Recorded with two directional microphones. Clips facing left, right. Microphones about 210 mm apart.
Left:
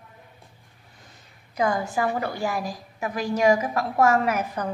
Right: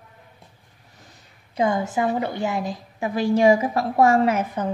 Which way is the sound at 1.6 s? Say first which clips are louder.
Right 2 dB; 25° right (ahead or behind).